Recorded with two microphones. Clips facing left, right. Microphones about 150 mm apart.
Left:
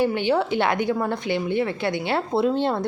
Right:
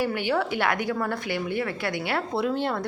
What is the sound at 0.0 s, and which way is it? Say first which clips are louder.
A woman's voice: left 4 dB; 25° left (ahead or behind).